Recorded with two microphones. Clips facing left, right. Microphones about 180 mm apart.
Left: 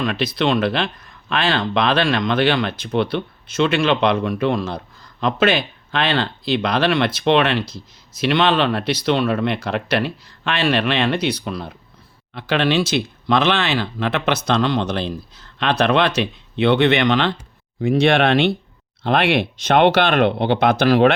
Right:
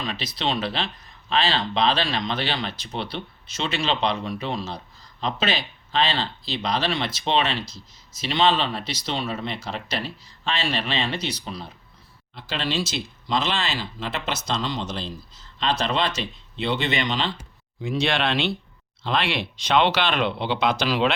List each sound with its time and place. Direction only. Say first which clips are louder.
0.0 s speech: left 8 dB; 55° left (ahead or behind)